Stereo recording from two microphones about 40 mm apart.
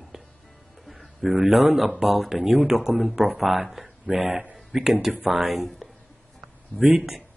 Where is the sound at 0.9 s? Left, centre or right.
Centre.